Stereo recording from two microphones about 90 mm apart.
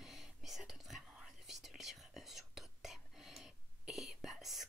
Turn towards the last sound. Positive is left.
turn(degrees=-5)  # may be behind; listen again after turning